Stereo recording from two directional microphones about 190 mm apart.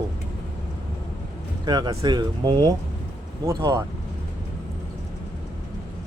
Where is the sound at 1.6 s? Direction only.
20° right (ahead or behind).